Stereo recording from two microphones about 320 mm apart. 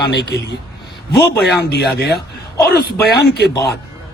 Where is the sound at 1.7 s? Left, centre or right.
Left.